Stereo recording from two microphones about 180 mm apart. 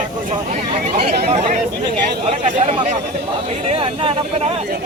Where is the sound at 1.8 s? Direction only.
25° right (ahead or behind).